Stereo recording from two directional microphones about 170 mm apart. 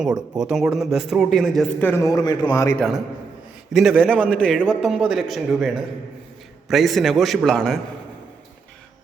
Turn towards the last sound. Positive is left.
turn(degrees=5)  # may be behind; listen again after turning